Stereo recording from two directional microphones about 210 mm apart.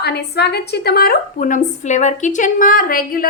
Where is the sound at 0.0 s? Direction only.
50° left (ahead or behind).